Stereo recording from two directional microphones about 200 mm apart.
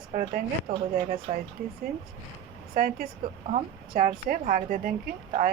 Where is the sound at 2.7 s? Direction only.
45° right (ahead or behind).